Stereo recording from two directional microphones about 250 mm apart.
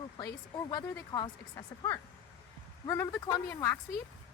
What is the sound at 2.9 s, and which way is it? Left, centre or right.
Speech, centre.